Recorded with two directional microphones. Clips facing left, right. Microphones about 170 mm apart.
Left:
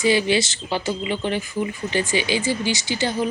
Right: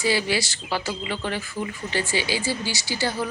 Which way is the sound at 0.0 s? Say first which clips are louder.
Left 5 dB; 20° left (ahead or behind).